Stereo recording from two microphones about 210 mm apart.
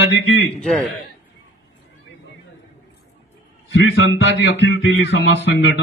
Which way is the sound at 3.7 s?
60° left (ahead or behind).